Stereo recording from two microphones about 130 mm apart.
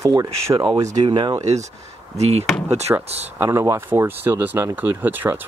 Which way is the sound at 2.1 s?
55° right (ahead or behind).